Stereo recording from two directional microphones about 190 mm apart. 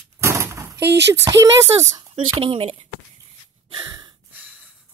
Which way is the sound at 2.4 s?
30° right (ahead or behind).